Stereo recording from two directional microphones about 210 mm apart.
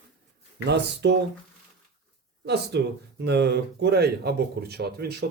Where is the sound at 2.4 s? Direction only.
50° right (ahead or behind).